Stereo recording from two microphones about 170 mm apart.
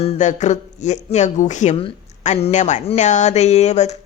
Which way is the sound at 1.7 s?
35° left (ahead or behind).